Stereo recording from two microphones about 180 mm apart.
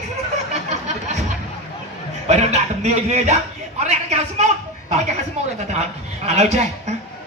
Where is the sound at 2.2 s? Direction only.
40° right (ahead or behind).